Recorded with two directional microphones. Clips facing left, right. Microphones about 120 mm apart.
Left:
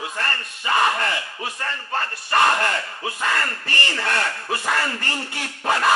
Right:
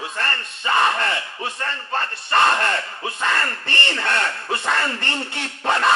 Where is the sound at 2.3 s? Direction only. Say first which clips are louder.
Right 1 dB; 25° right (ahead or behind).